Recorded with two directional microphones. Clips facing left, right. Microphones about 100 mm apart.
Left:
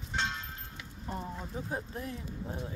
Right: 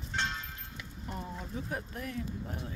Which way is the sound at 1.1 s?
30° left (ahead or behind).